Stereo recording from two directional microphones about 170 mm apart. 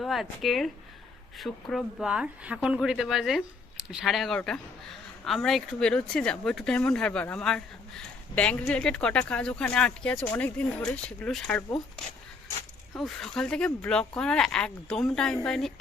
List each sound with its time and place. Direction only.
0.0 s speech: centre (ahead or behind)
13.0 s speech: centre (ahead or behind)